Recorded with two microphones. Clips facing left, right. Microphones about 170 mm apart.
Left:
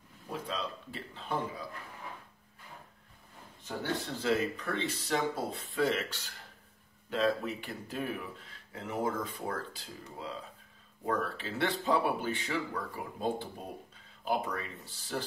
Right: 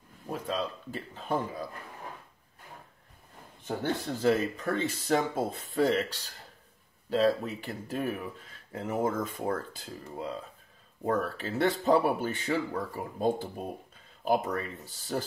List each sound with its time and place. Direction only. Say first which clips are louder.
0.3 s speech: right 5 dB; 45° right (ahead or behind)
3.6 s speech: right 4 dB; 50° right (ahead or behind)
11.1 s speech: right 4 dB; 45° right (ahead or behind)